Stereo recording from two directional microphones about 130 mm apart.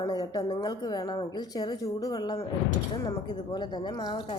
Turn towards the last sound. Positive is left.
turn(degrees=35)  # may be behind; listen again after turning